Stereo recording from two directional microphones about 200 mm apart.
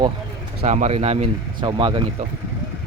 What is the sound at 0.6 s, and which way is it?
Speech, 35° right (ahead or behind).